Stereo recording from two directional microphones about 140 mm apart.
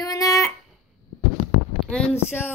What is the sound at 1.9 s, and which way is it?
Speech, 10° left (ahead or behind).